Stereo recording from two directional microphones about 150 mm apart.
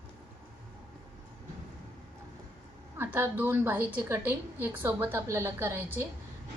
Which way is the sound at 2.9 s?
15° right (ahead or behind).